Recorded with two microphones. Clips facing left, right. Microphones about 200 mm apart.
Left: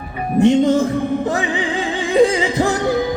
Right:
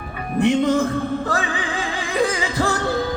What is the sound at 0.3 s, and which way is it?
Music, 20° left (ahead or behind).